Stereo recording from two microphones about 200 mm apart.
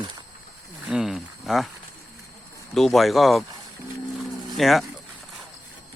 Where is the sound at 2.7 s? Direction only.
Centre (ahead or behind).